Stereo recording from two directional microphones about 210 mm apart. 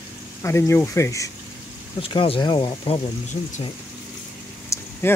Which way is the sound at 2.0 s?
25° left (ahead or behind).